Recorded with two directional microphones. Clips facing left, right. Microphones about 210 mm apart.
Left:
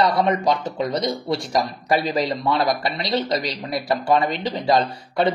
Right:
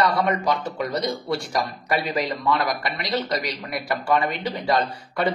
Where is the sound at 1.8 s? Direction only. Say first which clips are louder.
Left 3 dB; 35° left (ahead or behind).